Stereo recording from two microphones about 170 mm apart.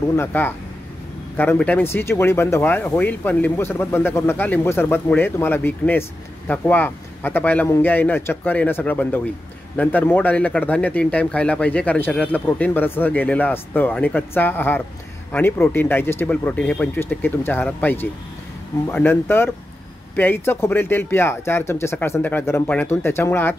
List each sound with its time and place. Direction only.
0.1 s speech: 15° left (ahead or behind)